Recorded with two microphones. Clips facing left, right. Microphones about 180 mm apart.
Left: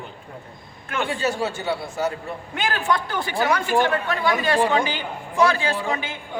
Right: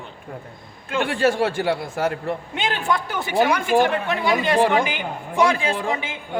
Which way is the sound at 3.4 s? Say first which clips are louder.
Right 3 dB; 15° right (ahead or behind).